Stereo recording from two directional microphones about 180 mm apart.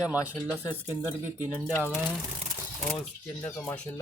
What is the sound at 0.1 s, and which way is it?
Speech, 10° right (ahead or behind).